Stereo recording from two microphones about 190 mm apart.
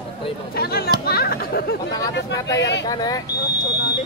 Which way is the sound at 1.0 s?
55° left (ahead or behind).